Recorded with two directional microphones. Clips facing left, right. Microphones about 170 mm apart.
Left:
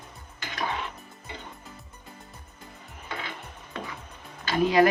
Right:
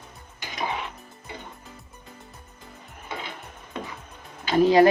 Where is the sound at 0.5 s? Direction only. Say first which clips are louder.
Right 1 dB; 15° right (ahead or behind).